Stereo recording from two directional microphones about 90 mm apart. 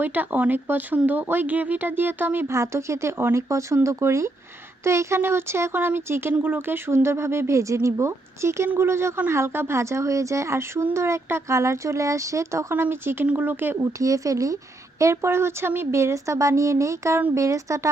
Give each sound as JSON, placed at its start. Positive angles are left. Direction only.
{"t": 0.0, "sound": "a woman's voice", "side_deg": -20}
{"t": 14.0, "sound": "a woman's voice", "side_deg": -40}